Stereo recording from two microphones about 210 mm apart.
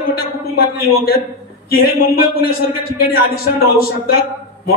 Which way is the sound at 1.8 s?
45° left (ahead or behind).